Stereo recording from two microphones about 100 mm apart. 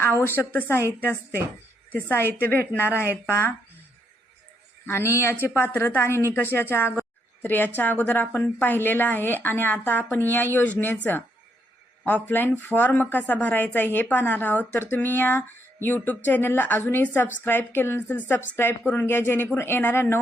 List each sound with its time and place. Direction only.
0.0 s a woman's voice: 20° left (ahead or behind)
4.9 s a woman's voice: 25° left (ahead or behind)